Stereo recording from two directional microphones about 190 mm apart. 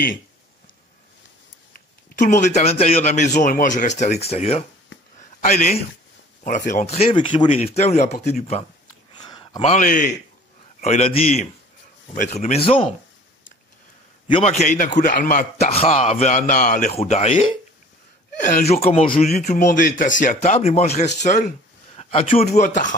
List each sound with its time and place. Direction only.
1.7 s a man's voice: 45° left (ahead or behind)
7.1 s speech: 25° left (ahead or behind)
9.2 s a sound: 20° left (ahead or behind)
9.6 s a man's voice: 40° left (ahead or behind)
10.8 s speech: 35° left (ahead or behind)
14.3 s a man's voice: 35° left (ahead or behind)
15.7 s speech: 35° left (ahead or behind)
21.9 s a sound: 30° left (ahead or behind)
22.4 s a man's voice: 50° left (ahead or behind)